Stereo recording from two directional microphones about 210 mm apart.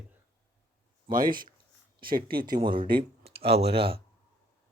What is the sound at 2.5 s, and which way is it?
Speech, 20° right (ahead or behind).